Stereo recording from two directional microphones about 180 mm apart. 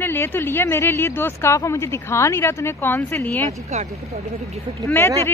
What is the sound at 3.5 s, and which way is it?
Speech, 40° right (ahead or behind).